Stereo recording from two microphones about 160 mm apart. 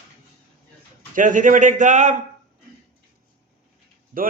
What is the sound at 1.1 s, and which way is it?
A man's voice, 55° right (ahead or behind).